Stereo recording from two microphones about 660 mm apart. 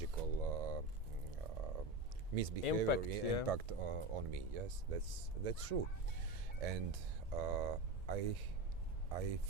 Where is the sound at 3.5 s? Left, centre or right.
Right.